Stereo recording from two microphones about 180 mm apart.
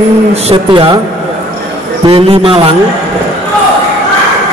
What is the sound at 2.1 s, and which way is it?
Speech, 30° right (ahead or behind).